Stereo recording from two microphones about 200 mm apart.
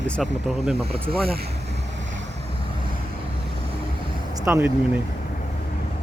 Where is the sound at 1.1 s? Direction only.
50° right (ahead or behind).